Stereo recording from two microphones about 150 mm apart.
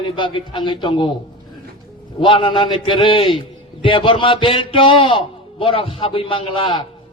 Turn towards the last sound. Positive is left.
turn(degrees=35)  # may be behind; listen again after turning